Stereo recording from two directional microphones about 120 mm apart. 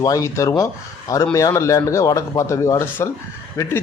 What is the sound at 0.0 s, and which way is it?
Speech, 30° left (ahead or behind).